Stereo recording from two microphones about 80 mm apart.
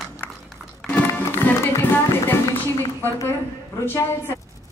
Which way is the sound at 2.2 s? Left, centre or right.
Left.